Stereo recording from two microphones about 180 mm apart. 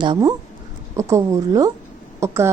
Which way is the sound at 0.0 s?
25° right (ahead or behind).